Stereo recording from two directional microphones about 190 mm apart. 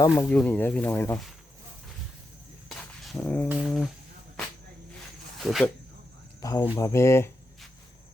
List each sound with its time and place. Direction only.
0.2 s speech: 10° left (ahead or behind)
3.2 s speech: 10° left (ahead or behind)
3.5 s a sound: centre (ahead or behind)
5.4 s speech: centre (ahead or behind)
6.4 s speech: 15° left (ahead or behind)